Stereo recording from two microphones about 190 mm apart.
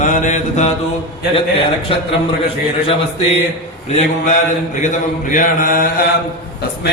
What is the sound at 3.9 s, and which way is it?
Mantra, 40° left (ahead or behind).